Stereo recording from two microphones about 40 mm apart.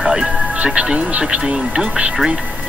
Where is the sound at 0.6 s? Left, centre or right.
Right.